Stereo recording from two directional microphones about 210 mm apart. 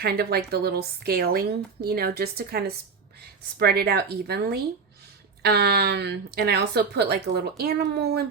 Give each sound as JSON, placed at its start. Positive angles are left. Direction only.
{"t": 0.0, "sound": "speech", "side_deg": -50}